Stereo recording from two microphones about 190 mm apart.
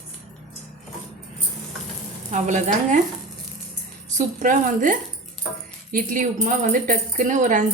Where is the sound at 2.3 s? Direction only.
40° right (ahead or behind).